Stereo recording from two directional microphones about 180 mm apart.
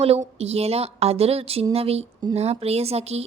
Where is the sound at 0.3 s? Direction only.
35° right (ahead or behind).